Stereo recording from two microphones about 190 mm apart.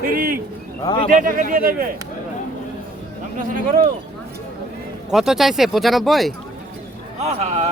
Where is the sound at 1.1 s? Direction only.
45° right (ahead or behind).